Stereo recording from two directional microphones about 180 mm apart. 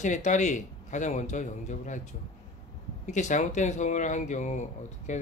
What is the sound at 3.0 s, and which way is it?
Speech, 40° left (ahead or behind).